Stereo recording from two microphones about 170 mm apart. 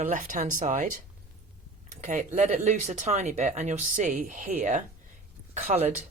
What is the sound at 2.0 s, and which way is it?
Speech, 45° right (ahead or behind).